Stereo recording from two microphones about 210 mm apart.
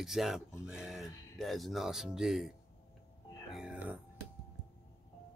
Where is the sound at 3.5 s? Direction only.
5° right (ahead or behind).